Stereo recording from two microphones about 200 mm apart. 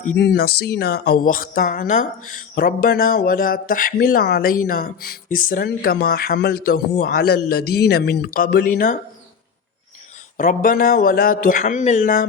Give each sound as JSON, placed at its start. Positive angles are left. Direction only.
{"t": 0.2, "sound": "speech", "side_deg": 55}
{"t": 10.3, "sound": "speech", "side_deg": 45}